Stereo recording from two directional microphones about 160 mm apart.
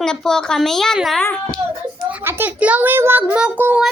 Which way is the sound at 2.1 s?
15° right (ahead or behind).